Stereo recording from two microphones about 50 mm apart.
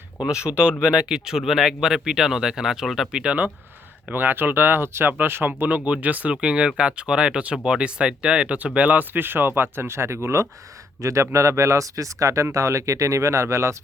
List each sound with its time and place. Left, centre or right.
0.2 s speech: centre
3.1 s speech: centre
4.1 s speech: right
5.5 s speech: right